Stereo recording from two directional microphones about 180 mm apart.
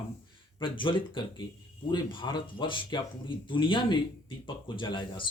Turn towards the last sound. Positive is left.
turn(degrees=25)  # may be behind; listen again after turning